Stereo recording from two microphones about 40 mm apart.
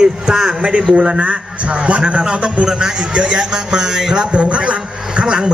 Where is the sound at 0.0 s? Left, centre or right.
Centre.